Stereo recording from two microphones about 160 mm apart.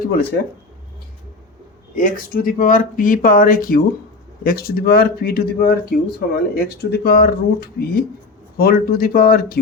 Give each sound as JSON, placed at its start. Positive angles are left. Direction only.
{"t": 2.0, "sound": "speech", "side_deg": 65}